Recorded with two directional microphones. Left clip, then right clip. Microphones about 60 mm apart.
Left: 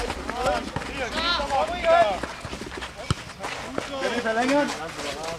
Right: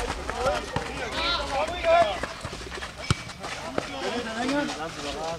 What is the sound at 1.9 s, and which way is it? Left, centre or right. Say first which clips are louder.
Run: left 2 dB; left.